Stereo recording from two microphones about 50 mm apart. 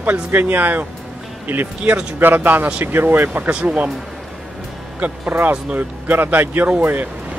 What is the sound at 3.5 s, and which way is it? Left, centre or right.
Speech, right.